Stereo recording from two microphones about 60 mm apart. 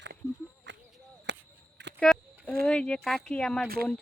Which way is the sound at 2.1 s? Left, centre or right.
Centre.